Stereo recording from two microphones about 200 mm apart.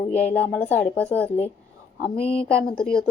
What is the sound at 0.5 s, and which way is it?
Speech, 5° left (ahead or behind).